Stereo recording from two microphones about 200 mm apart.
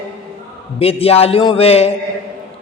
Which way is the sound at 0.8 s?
30° left (ahead or behind).